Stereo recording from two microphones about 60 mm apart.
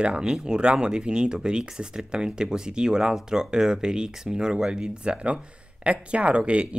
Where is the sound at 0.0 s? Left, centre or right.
Centre.